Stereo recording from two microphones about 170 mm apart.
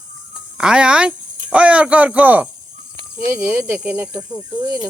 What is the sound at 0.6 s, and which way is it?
Speech, 5° right (ahead or behind).